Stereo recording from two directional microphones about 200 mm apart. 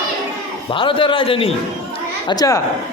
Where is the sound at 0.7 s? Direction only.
25° left (ahead or behind).